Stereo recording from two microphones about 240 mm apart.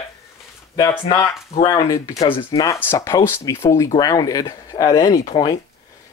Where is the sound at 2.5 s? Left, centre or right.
Centre.